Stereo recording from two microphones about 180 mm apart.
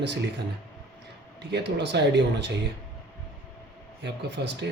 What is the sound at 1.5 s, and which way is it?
Speech, 70° right (ahead or behind).